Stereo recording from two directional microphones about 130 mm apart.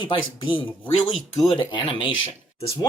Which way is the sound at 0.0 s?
40° left (ahead or behind).